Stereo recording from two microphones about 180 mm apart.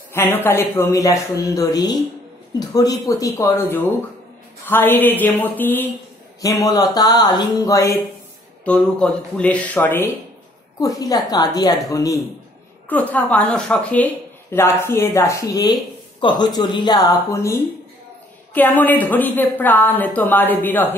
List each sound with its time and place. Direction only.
0.1 s speech: 10° left (ahead or behind)
8.6 s speech: 5° left (ahead or behind)